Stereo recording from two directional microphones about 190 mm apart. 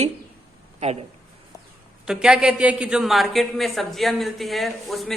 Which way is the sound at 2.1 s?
5° right (ahead or behind).